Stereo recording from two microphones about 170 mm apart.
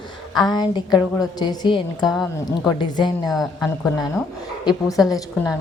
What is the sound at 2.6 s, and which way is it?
Speech, 25° left (ahead or behind).